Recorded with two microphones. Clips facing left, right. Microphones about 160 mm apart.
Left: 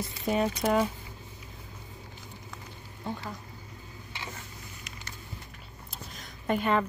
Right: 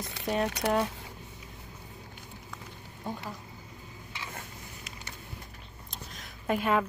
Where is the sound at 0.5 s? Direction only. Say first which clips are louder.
Left 2 dB; 70° right (ahead or behind).